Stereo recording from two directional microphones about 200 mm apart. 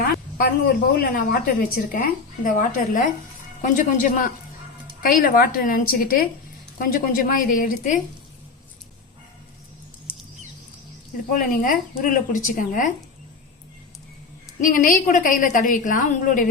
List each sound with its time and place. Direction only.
0.0 s a woman's voice: 50° left (ahead or behind)
11.3 s a woman's voice: 45° left (ahead or behind)
14.6 s a woman's voice: 45° left (ahead or behind)